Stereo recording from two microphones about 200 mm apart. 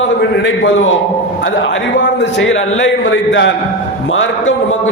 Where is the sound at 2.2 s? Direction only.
65° left (ahead or behind).